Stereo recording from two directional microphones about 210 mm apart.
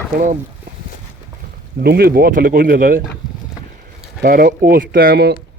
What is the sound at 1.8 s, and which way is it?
Speech, 45° right (ahead or behind).